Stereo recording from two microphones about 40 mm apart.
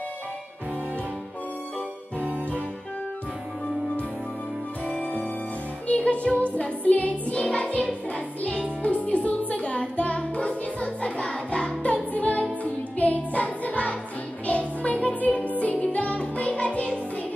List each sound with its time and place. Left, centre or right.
4.8 s music: left
8.8 s music: left
11.8 s music: left